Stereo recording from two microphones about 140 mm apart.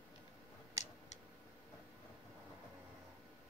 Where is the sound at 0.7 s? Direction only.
55° left (ahead or behind).